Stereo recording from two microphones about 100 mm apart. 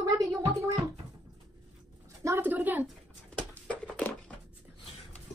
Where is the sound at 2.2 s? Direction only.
20° right (ahead or behind).